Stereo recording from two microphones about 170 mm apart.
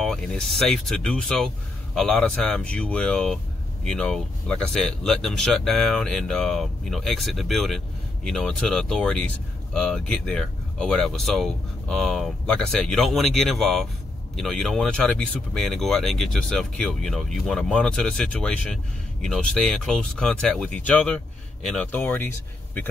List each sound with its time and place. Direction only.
0.0 s speech: 5° left (ahead or behind)